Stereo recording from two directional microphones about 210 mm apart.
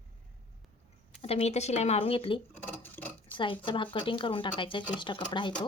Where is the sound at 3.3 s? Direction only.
25° left (ahead or behind).